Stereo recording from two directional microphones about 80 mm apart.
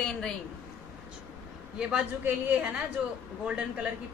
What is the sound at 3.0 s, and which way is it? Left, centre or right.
Speech, centre.